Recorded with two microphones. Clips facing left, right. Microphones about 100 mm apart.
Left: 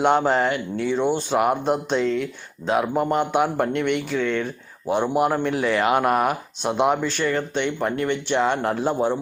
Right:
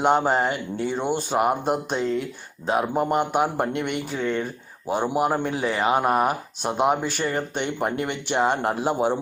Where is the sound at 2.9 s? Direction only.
5° right (ahead or behind).